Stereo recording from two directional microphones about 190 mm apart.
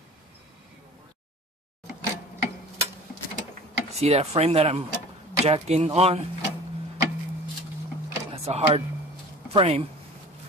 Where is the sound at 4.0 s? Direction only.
35° right (ahead or behind).